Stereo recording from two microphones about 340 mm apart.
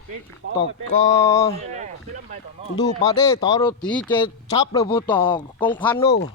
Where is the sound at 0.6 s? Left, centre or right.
Centre.